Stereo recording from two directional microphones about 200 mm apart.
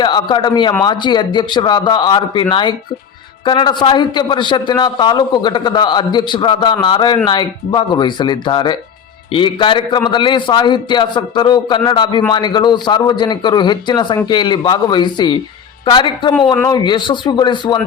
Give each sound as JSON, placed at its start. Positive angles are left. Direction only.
{"t": 0.0, "sound": "a man's voice", "side_deg": 20}